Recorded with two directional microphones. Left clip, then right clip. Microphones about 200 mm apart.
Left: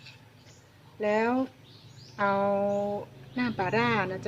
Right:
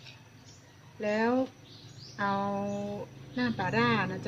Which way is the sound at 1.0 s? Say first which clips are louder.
Left 2 dB; 55° left (ahead or behind).